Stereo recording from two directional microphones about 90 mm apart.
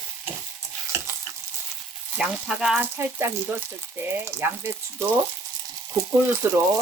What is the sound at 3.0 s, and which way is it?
Frying, 25° right (ahead or behind).